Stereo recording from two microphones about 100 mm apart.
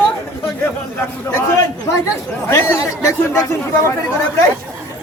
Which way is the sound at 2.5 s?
30° left (ahead or behind).